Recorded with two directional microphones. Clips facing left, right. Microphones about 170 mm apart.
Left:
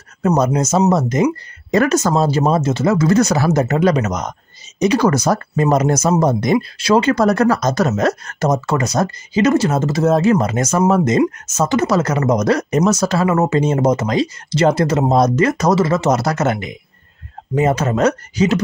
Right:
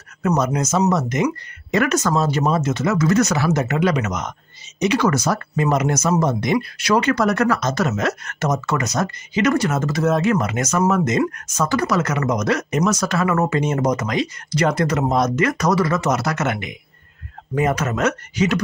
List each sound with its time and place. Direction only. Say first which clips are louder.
0.2 s speech: left 4 dB; 25° left (ahead or behind)